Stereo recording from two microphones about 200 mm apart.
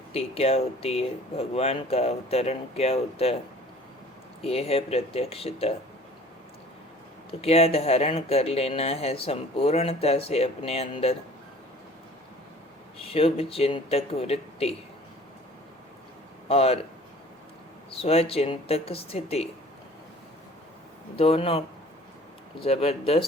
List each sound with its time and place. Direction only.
0.1 s speech: 30° left (ahead or behind)
4.4 s speech: 30° left (ahead or behind)
7.3 s speech: 30° left (ahead or behind)
13.0 s speech: 30° left (ahead or behind)
16.5 s speech: 30° left (ahead or behind)
17.9 s speech: 30° left (ahead or behind)
21.2 s speech: 30° left (ahead or behind)
22.6 s speech: 30° left (ahead or behind)